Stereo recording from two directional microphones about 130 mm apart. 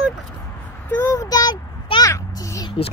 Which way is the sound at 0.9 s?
20° left (ahead or behind).